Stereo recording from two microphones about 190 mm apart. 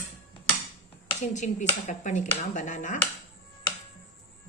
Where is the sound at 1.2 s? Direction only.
40° left (ahead or behind).